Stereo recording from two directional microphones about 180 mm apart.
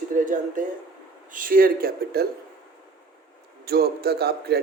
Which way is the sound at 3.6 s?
60° right (ahead or behind).